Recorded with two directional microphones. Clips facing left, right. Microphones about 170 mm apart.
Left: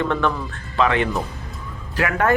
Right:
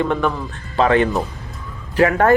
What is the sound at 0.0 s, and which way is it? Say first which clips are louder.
Speech: right 2 dB; 15° right (ahead or behind).